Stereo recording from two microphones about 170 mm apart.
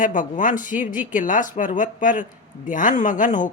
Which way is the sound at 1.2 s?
50° left (ahead or behind).